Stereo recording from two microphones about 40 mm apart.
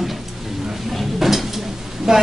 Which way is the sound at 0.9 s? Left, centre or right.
Centre.